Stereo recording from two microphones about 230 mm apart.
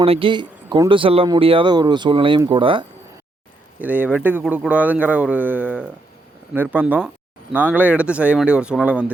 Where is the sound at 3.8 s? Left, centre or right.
Centre.